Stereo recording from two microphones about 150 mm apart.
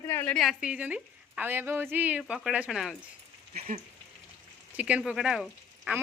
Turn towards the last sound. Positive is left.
turn(degrees=-5)  # may be behind; listen again after turning